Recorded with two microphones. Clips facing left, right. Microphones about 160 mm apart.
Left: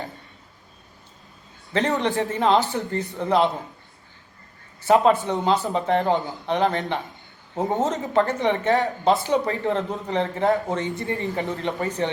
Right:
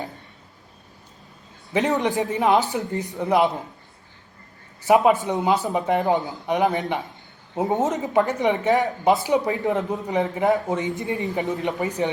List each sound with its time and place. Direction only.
1.7 s speech: 15° right (ahead or behind)
4.9 s speech: 15° right (ahead or behind)